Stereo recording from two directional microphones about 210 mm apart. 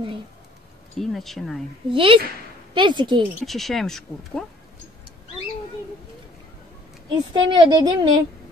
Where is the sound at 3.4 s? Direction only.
Centre (ahead or behind).